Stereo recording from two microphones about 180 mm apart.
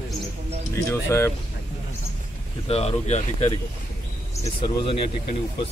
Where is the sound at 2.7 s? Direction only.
35° left (ahead or behind).